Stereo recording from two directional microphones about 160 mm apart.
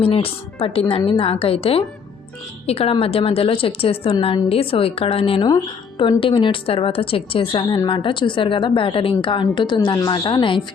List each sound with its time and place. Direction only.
0.0 s a woman's voice: 35° left (ahead or behind)